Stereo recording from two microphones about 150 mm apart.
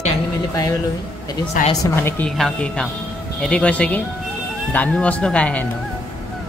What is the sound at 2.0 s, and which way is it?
Speech, 10° left (ahead or behind).